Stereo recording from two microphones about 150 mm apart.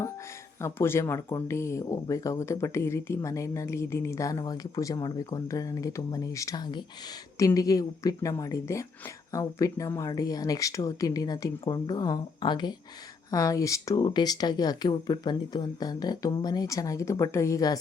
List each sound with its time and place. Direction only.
0.6 s speech: 15° left (ahead or behind)